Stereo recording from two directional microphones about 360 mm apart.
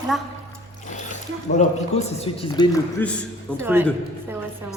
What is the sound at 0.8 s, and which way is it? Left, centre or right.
Speech, centre.